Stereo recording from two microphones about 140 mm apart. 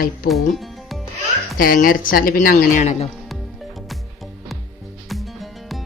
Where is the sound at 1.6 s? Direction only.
90° left; by 3.0 s 55° left (ahead or behind).